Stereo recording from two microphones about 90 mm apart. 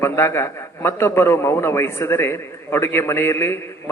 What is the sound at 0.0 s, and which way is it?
A man's voice, 30° left (ahead or behind).